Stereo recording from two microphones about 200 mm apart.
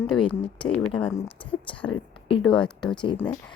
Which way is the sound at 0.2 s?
25° left (ahead or behind).